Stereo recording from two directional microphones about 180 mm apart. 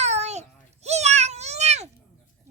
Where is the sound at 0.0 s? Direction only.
40° right (ahead or behind).